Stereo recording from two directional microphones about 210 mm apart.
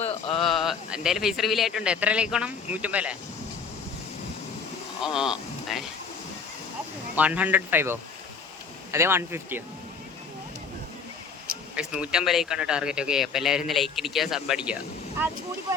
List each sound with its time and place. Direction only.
0.0 s a sound: 25° left (ahead or behind)
0.3 s a man's voice: centre (ahead or behind)
5.0 s speech: 5° right (ahead or behind)
7.2 s speech: 5° right (ahead or behind)
11.8 s speech: 5° right (ahead or behind)